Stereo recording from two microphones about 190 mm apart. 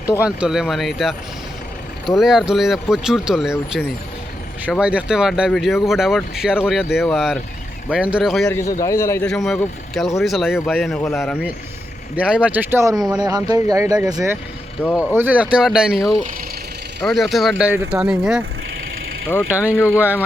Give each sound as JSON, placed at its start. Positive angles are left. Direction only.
{"t": 0.3, "sound": "speech", "side_deg": -5}
{"t": 8.4, "sound": "a man's voice", "side_deg": 15}
{"t": 9.3, "sound": "speech", "side_deg": 0}
{"t": 12.1, "sound": "speech", "side_deg": -5}
{"t": 14.8, "sound": "speech", "side_deg": -10}
{"t": 19.3, "sound": "a man's voice", "side_deg": 10}
{"t": 20.0, "sound": "speech", "side_deg": -10}